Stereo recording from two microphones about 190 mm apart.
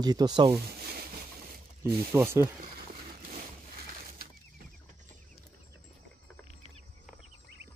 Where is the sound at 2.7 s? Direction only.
50° right (ahead or behind).